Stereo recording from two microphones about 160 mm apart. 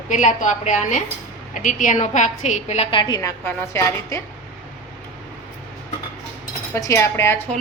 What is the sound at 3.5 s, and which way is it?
Speech, 15° left (ahead or behind).